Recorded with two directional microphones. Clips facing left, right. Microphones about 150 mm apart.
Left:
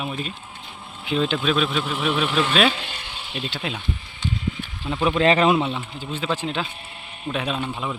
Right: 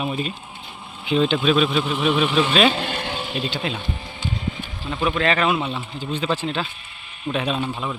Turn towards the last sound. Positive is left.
turn(degrees=10)  # may be behind; listen again after turning